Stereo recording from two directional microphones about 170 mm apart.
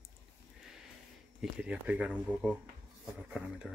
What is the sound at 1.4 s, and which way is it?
Speech, 5° right (ahead or behind).